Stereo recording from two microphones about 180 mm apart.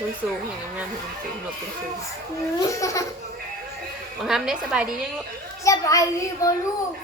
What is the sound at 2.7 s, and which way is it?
Laughter, 15° left (ahead or behind).